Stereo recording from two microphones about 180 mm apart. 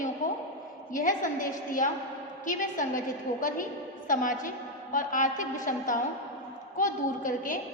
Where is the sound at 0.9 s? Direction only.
45° left (ahead or behind).